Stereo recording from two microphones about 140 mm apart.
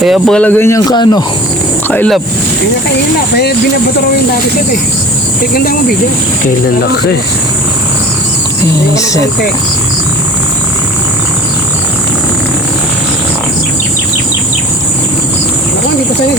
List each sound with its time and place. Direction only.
0.0 s speech: centre (ahead or behind)
0.9 s speech: 30° left (ahead or behind)
1.9 s speech: 10° left (ahead or behind)
5.5 s speech: 90° left